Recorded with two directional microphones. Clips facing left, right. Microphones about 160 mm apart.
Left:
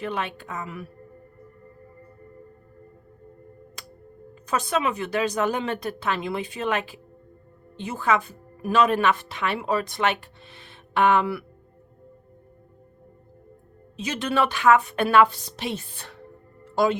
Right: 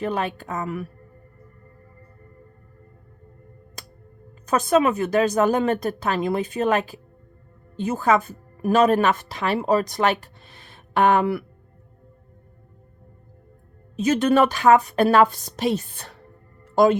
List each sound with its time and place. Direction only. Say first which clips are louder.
0.0 s a woman's voice: right 4 dB; 40° right (ahead or behind)
4.4 s speech: right 6 dB; 45° right (ahead or behind)
13.9 s speech: right 8 dB; 45° right (ahead or behind)